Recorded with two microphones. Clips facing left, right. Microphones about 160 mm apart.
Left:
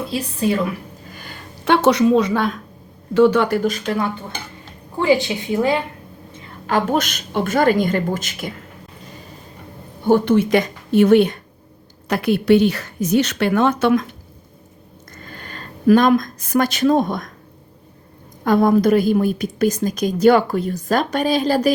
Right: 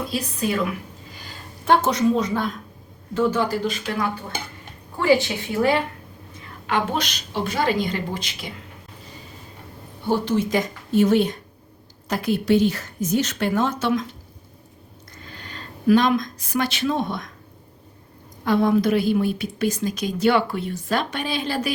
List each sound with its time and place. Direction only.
0.1 s speech: 30° left (ahead or behind)
1.1 s speech: 60° left (ahead or behind)
3.9 s speech: 30° left (ahead or behind)
4.9 s speech: 20° left (ahead or behind)
6.7 s a woman's voice: 45° left (ahead or behind)
10.1 s a woman's voice: 60° left (ahead or behind)
18.4 s a woman's voice: 45° left (ahead or behind)